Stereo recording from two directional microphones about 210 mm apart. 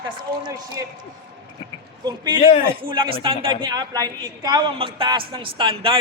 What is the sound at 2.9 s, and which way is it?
A man's voice, 25° right (ahead or behind).